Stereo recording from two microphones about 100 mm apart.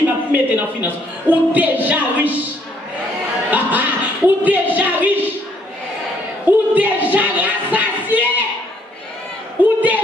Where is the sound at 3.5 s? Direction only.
15° right (ahead or behind).